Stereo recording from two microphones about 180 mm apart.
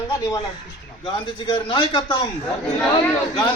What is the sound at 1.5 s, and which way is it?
Speech, 30° left (ahead or behind).